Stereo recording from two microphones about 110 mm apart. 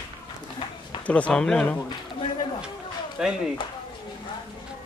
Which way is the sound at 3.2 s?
5° right (ahead or behind).